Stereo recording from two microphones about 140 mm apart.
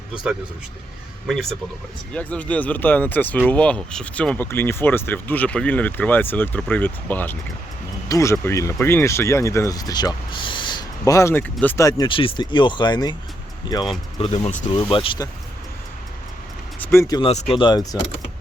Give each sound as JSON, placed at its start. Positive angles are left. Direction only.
{"t": 1.3, "sound": "speech", "side_deg": 0}
{"t": 11.9, "sound": "speech", "side_deg": 30}
{"t": 14.2, "sound": "speech", "side_deg": 50}
{"t": 14.7, "sound": "speech", "side_deg": 40}
{"t": 16.8, "sound": "speech", "side_deg": 20}
{"t": 17.2, "sound": "speech", "side_deg": 40}